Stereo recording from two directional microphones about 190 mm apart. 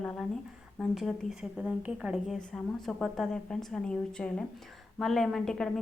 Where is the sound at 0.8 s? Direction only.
Centre (ahead or behind).